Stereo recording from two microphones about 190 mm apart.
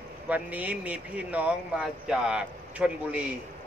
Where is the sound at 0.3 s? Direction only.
10° right (ahead or behind).